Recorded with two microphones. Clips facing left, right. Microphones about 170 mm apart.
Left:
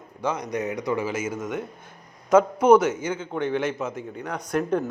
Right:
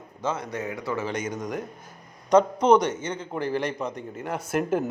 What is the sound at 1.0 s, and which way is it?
A man's voice, 5° left (ahead or behind).